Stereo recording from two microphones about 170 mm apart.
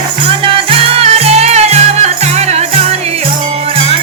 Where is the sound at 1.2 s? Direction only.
40° right (ahead or behind).